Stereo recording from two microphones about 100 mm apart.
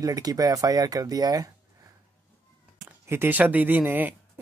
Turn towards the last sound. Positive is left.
turn(degrees=-20)  # may be behind; listen again after turning